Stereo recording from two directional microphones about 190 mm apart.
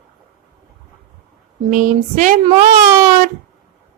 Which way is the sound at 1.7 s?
40° right (ahead or behind).